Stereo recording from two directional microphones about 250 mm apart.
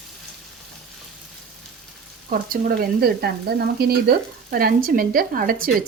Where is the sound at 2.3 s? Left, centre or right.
Right.